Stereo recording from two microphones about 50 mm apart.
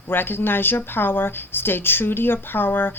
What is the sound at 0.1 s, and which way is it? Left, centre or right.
Speech, left.